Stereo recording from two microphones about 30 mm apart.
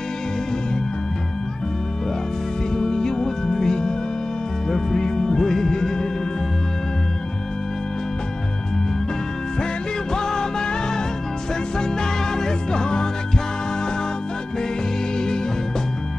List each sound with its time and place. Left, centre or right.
2.7 s music: left
10.1 s music: left
15.1 s music: left